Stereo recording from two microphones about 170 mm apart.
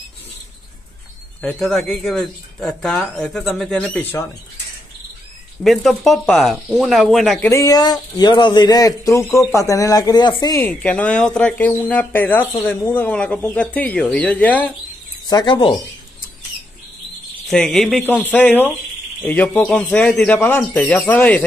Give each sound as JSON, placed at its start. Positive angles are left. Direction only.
{"t": 1.4, "sound": "speech", "side_deg": 0}
{"t": 5.6, "sound": "speech", "side_deg": 0}
{"t": 7.4, "sound": "speech", "side_deg": 20}
{"t": 10.6, "sound": "speech", "side_deg": 10}
{"t": 15.2, "sound": "speech", "side_deg": 25}
{"t": 17.5, "sound": "speech", "side_deg": 5}